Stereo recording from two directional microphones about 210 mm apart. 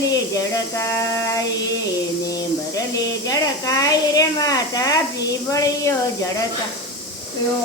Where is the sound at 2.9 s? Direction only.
15° left (ahead or behind).